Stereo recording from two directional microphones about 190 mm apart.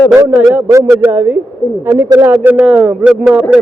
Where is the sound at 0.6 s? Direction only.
15° right (ahead or behind).